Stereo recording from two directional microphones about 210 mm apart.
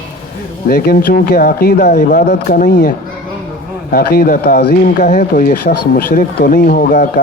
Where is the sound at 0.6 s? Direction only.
45° left (ahead or behind).